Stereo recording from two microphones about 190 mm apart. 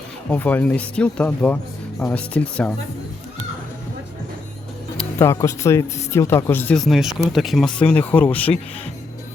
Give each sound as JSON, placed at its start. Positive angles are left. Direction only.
{"t": 0.3, "sound": "speech", "side_deg": 10}
{"t": 5.2, "sound": "speech", "side_deg": 15}